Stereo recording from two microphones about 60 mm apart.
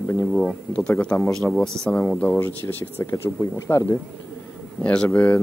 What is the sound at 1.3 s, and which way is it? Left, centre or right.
Speech, centre.